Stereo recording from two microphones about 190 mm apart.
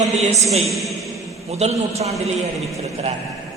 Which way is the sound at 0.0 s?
35° right (ahead or behind).